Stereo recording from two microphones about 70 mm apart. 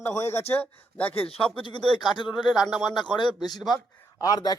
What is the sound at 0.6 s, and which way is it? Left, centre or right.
Speech, left.